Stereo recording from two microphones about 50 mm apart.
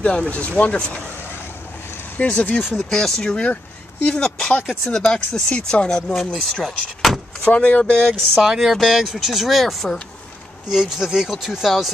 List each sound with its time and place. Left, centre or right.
0.3 s speech: left
2.1 s speech: left
2.7 s speech: centre
3.0 s speech: centre
7.5 s speech: left
8.4 s speech: centre